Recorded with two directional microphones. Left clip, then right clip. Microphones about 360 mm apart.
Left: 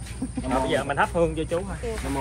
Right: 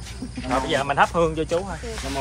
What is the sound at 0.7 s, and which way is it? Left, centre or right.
Speech, right.